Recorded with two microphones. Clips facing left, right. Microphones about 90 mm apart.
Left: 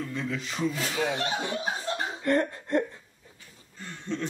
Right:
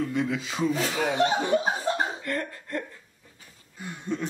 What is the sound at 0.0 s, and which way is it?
Rub, 15° right (ahead or behind).